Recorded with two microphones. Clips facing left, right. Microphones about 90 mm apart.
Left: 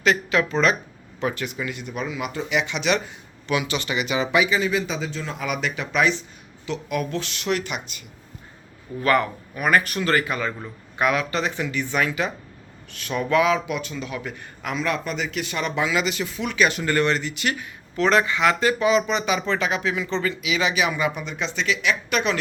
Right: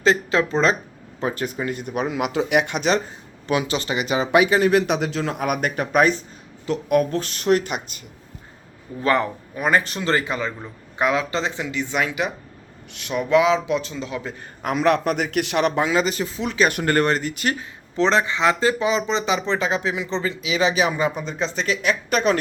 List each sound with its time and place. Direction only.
0.0 s speech: 30° right (ahead or behind)
9.0 s a man's voice: 25° right (ahead or behind)
14.6 s a man's voice: 50° right (ahead or behind)
15.7 s speech: 40° right (ahead or behind)
16.6 s speech: 50° right (ahead or behind)